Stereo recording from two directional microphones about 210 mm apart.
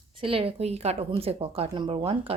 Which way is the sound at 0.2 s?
25° right (ahead or behind).